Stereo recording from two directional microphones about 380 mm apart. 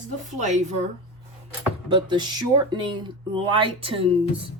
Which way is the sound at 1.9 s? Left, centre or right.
Centre.